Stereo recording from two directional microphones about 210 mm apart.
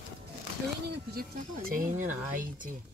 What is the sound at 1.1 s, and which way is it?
Speech, 45° right (ahead or behind).